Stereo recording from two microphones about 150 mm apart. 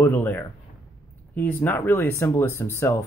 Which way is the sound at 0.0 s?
15° left (ahead or behind).